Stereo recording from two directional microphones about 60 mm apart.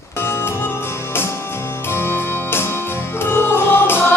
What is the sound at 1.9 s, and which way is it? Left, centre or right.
Music, left.